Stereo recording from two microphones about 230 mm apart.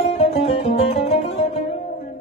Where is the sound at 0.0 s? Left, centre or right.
Left.